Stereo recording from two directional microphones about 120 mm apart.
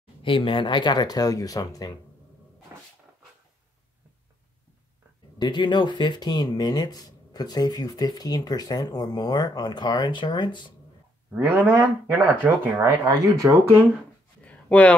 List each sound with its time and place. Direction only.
0.2 s speech: 45° left (ahead or behind); by 1.9 s 30° left (ahead or behind)
5.4 s speech: 40° left (ahead or behind)
11.3 s speech: 15° right (ahead or behind)
14.4 s a sound: 10° left (ahead or behind)